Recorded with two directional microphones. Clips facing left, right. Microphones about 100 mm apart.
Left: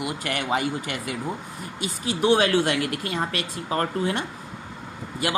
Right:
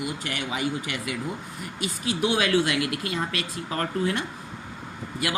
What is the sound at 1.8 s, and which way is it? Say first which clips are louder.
Speech: left 2 dB; 30° left (ahead or behind).